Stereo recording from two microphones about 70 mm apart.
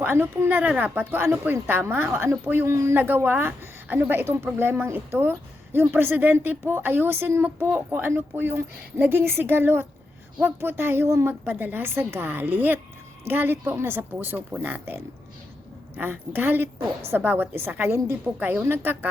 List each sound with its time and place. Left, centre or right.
0.0 s a woman's voice: right